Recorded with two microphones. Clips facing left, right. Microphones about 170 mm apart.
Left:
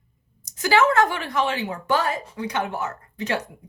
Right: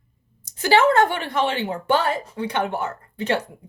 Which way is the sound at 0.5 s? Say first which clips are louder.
Right 2 dB; 30° right (ahead or behind).